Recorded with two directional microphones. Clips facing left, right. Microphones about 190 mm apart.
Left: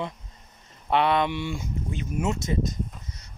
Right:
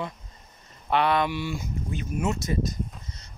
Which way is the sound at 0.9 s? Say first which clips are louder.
Left 1 dB; 25° left (ahead or behind).